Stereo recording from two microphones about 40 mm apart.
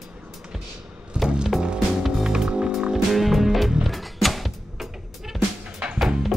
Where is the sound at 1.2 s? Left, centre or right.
Right.